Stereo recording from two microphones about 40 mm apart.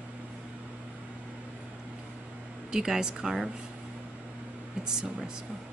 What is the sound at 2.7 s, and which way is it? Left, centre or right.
Speech, centre.